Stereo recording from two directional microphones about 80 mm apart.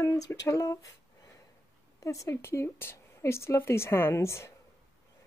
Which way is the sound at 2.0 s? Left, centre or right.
Left.